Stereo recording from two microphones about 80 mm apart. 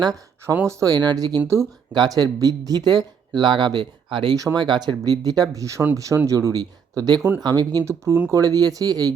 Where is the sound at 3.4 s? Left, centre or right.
Right.